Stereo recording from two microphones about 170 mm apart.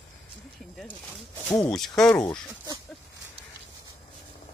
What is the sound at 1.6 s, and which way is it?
Speech, 5° left (ahead or behind).